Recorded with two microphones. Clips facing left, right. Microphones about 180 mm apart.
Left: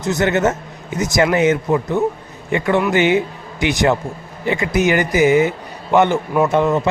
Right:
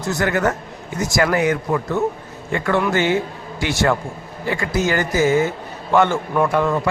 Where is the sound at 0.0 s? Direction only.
20° left (ahead or behind).